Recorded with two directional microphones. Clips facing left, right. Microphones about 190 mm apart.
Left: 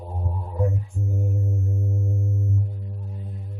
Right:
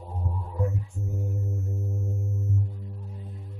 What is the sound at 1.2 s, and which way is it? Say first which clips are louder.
Music: left 5 dB; 20° left (ahead or behind).